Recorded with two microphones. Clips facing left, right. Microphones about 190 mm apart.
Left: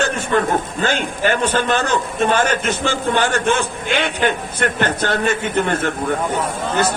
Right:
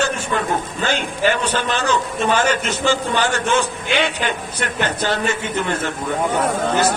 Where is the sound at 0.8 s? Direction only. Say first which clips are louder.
Left 1 dB; 50° left (ahead or behind).